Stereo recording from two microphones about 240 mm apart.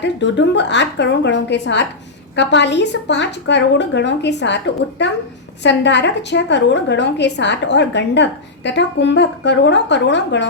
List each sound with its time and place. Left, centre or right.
0.0 s a woman's voice: left